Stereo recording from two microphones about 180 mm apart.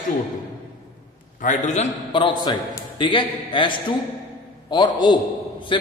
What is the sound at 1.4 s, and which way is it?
Speech, 45° left (ahead or behind).